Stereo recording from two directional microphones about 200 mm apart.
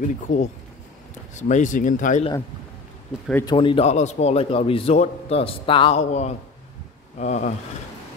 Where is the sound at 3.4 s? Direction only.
25° left (ahead or behind).